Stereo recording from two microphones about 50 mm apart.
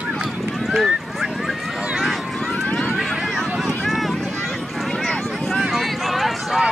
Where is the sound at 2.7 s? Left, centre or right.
Left.